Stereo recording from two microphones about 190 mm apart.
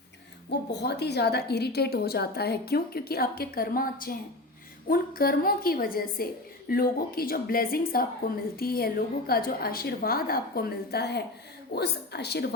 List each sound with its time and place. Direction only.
0.7 s a woman's voice: 60° left (ahead or behind)